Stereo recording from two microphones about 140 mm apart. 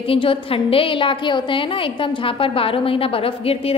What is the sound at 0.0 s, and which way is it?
A woman's voice, 40° left (ahead or behind).